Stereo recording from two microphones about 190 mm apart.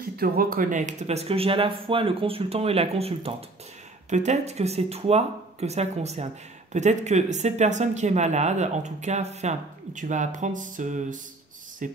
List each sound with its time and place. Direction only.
0.2 s speech: 50° right (ahead or behind)